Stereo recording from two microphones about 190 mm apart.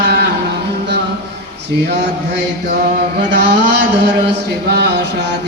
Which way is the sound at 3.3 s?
65° right (ahead or behind).